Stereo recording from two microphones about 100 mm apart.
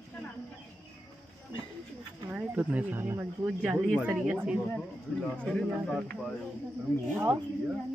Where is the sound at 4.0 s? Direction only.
10° right (ahead or behind).